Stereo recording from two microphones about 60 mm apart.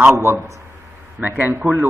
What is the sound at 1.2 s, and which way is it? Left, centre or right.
Speech, right.